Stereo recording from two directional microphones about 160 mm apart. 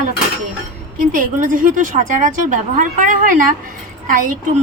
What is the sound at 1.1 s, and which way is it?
A woman's voice, 55° right (ahead or behind).